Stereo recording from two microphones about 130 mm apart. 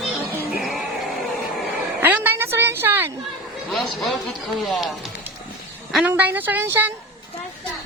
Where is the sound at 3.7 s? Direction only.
Centre (ahead or behind).